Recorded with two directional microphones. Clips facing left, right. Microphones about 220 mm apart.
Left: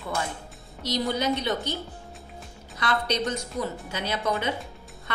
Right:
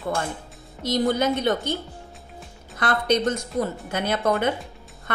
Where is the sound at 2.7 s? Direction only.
50° right (ahead or behind).